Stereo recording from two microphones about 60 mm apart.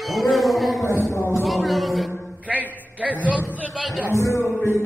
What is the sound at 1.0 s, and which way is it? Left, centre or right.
Speech, left.